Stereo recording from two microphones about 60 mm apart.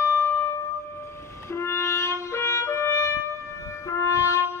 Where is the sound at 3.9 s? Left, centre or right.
Left.